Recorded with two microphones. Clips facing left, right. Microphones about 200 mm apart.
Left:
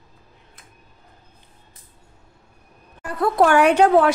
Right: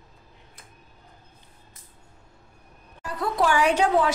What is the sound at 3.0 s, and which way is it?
Speech, 55° left (ahead or behind).